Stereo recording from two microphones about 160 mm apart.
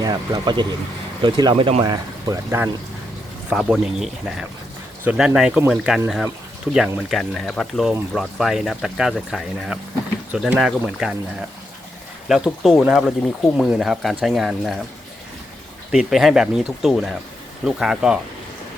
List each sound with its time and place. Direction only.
0.0 s speech: 25° right (ahead or behind)
3.5 s speech: centre (ahead or behind)
12.3 s speech: centre (ahead or behind)
15.9 s speech: centre (ahead or behind)